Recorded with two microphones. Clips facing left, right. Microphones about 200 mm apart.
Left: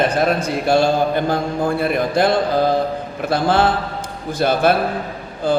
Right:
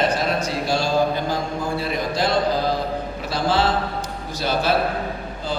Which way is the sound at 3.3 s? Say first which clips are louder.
Left 4 dB; 55° left (ahead or behind).